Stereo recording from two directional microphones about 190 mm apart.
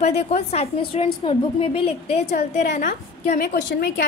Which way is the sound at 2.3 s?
45° left (ahead or behind).